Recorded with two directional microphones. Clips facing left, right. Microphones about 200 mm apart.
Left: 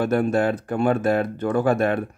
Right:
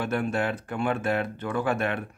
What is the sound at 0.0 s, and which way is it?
Speech, 40° left (ahead or behind).